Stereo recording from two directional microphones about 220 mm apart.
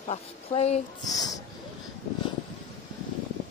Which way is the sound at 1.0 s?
15° left (ahead or behind).